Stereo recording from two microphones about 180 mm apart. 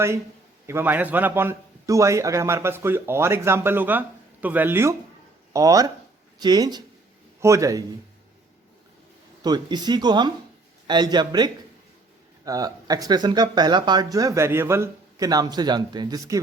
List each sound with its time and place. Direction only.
0.7 s a man's voice: 10° right (ahead or behind)
9.4 s speech: 25° right (ahead or behind)